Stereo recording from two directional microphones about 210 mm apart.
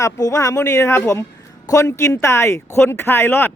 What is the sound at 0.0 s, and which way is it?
Speech, 15° left (ahead or behind).